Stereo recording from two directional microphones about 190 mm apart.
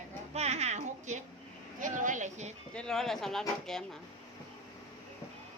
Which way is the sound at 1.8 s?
40° right (ahead or behind).